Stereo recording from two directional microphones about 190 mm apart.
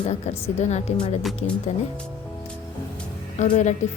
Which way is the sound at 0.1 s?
35° left (ahead or behind).